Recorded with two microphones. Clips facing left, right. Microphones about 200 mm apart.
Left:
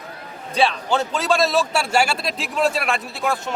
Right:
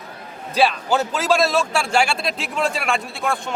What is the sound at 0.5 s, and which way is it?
A man's voice, 5° right (ahead or behind).